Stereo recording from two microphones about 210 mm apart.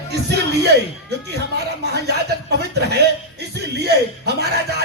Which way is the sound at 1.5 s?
50° right (ahead or behind).